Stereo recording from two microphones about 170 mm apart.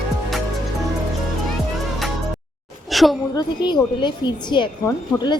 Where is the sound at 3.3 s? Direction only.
25° left (ahead or behind).